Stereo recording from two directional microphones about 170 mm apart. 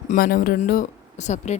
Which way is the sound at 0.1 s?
50° left (ahead or behind).